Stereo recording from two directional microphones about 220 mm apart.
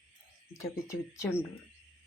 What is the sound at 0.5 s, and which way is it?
Speech, 15° left (ahead or behind).